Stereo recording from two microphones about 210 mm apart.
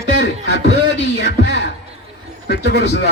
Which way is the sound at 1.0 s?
55° left (ahead or behind).